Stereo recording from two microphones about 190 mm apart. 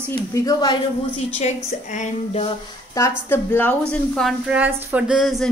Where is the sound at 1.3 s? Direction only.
35° left (ahead or behind).